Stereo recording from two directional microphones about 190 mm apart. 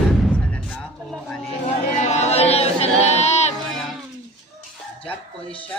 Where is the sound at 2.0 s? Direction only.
35° left (ahead or behind).